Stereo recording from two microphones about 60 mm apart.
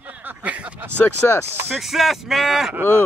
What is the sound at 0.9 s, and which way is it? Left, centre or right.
Speech, left.